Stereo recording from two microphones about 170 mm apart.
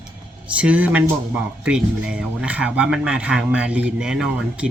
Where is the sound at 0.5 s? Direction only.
10° right (ahead or behind).